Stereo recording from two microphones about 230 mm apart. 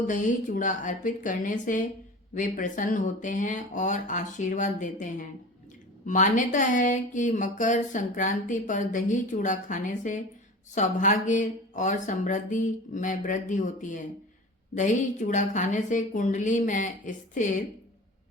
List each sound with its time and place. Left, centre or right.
0.1 s speech: left